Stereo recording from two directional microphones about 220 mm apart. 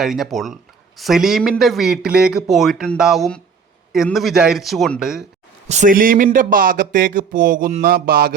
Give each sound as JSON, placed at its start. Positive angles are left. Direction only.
{"t": 0.0, "sound": "a man's voice", "side_deg": 0}
{"t": 5.6, "sound": "speech", "side_deg": -35}